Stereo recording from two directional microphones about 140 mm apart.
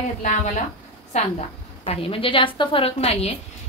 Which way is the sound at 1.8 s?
40° left (ahead or behind).